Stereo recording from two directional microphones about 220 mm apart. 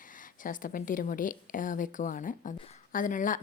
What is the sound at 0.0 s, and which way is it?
Speech, 40° left (ahead or behind).